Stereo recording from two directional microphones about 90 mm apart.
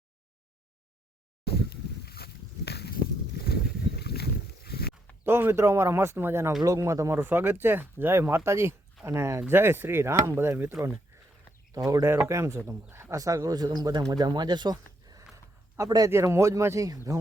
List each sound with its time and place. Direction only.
5.2 s speech: 25° right (ahead or behind)
6.6 s speech: 40° right (ahead or behind)
7.2 s speech: 20° right (ahead or behind)
11.7 s speech: 40° right (ahead or behind)